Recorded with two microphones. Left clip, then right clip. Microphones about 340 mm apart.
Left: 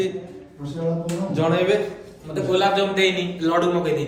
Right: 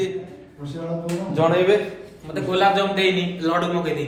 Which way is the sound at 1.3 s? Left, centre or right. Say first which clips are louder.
Right 3 dB; centre.